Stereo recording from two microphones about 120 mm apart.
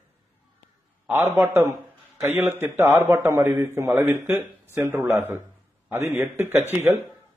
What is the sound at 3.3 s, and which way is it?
A man's voice, 30° right (ahead or behind).